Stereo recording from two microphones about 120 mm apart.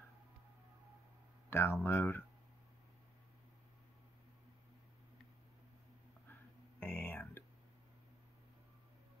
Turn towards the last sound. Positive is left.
turn(degrees=15)  # may be behind; listen again after turning